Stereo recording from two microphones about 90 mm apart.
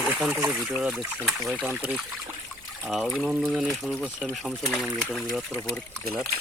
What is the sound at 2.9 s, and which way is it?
Speech, centre (ahead or behind).